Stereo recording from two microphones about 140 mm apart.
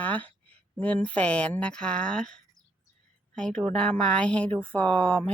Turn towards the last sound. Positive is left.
turn(degrees=10)  # may be behind; listen again after turning